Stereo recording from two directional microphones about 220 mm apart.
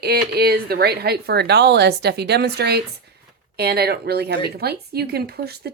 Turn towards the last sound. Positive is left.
turn(degrees=-45)  # may be behind; listen again after turning